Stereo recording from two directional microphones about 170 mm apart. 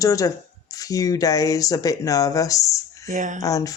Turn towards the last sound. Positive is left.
turn(degrees=20)  # may be behind; listen again after turning